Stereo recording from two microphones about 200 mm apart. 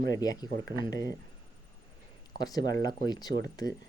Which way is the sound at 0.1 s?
20° left (ahead or behind).